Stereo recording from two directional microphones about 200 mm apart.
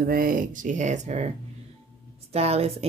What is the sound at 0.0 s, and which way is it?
Speech, 45° right (ahead or behind).